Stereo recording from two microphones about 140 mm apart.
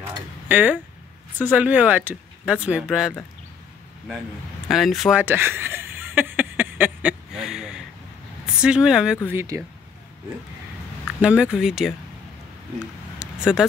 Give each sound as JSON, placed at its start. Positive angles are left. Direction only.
{"t": 0.0, "sound": "a sound", "side_deg": -10}
{"t": 1.4, "sound": "speech", "side_deg": -10}
{"t": 4.6, "sound": "speech", "side_deg": 0}
{"t": 5.2, "sound": "a sound", "side_deg": -15}
{"t": 8.5, "sound": "speech", "side_deg": -5}
{"t": 9.3, "sound": "speech", "side_deg": -20}
{"t": 11.1, "sound": "speech", "side_deg": -10}
{"t": 13.2, "sound": "vehicle", "side_deg": -5}